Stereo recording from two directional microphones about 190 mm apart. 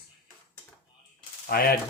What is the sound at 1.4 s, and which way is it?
Speech, 50° left (ahead or behind).